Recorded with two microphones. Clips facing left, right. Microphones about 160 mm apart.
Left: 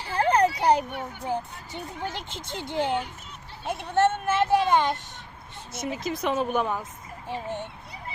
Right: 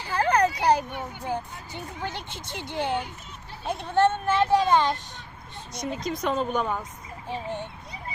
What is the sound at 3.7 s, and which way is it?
Speech, 5° left (ahead or behind).